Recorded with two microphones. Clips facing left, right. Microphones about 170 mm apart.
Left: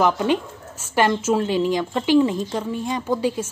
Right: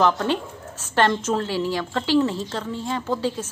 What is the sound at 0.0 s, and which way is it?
A woman's voice, 15° left (ahead or behind).